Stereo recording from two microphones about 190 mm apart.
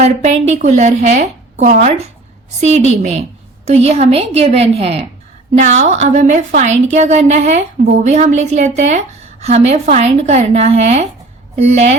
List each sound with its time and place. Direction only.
0.0 s a woman's voice: 35° right (ahead or behind)